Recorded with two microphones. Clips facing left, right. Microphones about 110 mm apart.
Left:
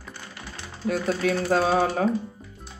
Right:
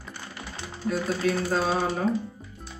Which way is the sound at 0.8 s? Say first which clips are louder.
Left 2 dB; 75° left (ahead or behind).